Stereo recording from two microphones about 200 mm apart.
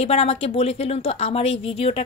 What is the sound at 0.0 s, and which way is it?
Speech, 30° left (ahead or behind).